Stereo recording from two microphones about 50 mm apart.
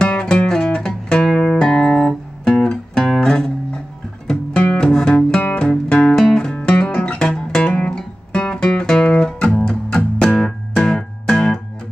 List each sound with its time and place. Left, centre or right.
0.0 s music: centre
1.6 s guitar: centre
4.7 s music: centre